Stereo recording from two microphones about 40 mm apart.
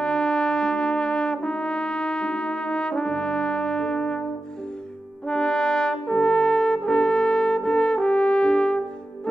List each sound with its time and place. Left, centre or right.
0.0 s brass instrument: centre
5.3 s brass instrument: centre